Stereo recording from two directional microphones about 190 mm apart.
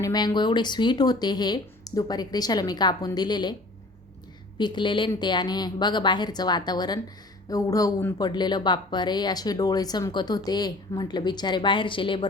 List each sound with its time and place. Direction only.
0.0 s speech: 20° left (ahead or behind)
4.5 s speech: 25° left (ahead or behind)